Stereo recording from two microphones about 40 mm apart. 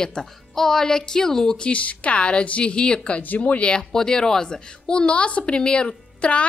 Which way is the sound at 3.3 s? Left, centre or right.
Left.